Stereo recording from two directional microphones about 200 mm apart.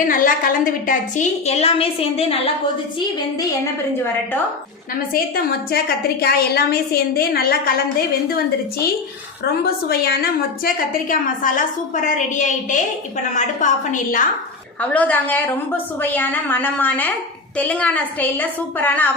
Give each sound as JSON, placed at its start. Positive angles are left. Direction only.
{"t": 0.1, "sound": "a woman's voice", "side_deg": 45}
{"t": 5.1, "sound": "a woman's voice", "side_deg": 50}
{"t": 9.4, "sound": "a woman's voice", "side_deg": 50}
{"t": 14.8, "sound": "a woman's voice", "side_deg": 5}